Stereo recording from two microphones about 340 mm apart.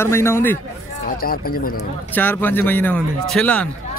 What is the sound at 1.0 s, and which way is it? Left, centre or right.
Speech, left.